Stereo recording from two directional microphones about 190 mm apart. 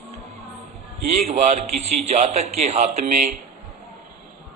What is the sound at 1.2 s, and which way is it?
A man's voice, 35° right (ahead or behind).